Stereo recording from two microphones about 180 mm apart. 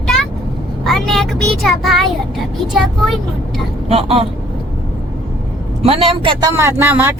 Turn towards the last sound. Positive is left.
turn(degrees=-10)  # may be behind; listen again after turning